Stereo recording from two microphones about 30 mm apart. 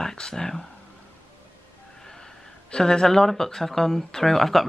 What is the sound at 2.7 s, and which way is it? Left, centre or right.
Speech, left.